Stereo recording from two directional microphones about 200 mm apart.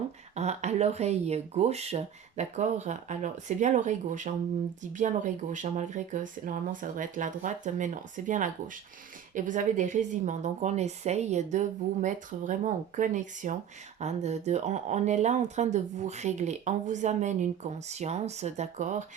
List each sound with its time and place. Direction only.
0.3 s speech: 35° right (ahead or behind)